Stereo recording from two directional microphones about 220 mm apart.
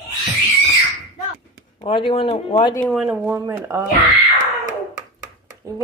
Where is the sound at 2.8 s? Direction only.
Centre (ahead or behind).